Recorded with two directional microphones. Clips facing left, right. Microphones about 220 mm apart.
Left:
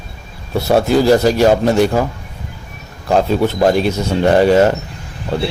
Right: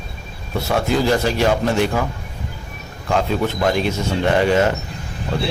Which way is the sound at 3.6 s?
40° left (ahead or behind).